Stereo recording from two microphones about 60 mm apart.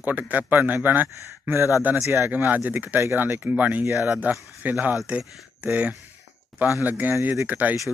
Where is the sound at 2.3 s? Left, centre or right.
Right.